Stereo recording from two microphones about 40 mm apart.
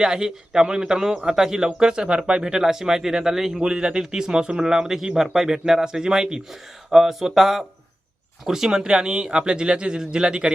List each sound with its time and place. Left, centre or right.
0.0 s a man's voice: centre
3.6 s a man's voice: right